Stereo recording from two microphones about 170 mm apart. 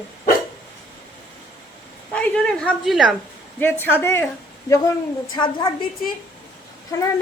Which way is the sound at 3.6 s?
10° left (ahead or behind).